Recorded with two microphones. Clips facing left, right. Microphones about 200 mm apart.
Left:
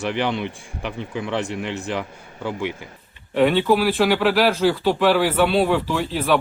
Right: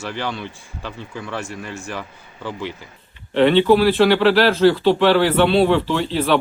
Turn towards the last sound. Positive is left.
turn(degrees=10)  # may be behind; listen again after turning